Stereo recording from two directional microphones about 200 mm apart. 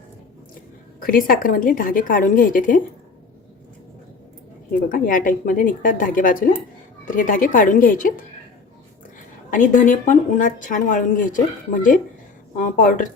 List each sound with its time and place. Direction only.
0.9 s a woman's voice: 45° left (ahead or behind)
4.9 s a woman's voice: 40° left (ahead or behind)
9.5 s speech: 40° left (ahead or behind)